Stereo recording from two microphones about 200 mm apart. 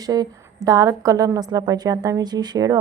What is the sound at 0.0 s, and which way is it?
A woman's voice, 20° right (ahead or behind).